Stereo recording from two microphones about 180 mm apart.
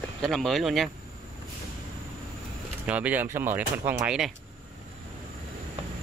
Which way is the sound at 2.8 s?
10° right (ahead or behind).